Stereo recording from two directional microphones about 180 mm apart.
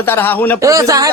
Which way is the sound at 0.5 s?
15° right (ahead or behind).